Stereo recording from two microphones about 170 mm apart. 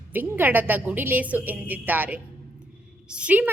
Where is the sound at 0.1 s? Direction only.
10° right (ahead or behind).